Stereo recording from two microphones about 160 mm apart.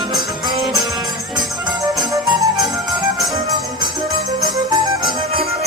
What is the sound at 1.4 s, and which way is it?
Music, 25° right (ahead or behind).